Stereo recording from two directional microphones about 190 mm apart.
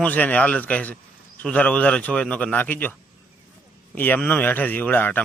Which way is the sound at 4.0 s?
10° left (ahead or behind).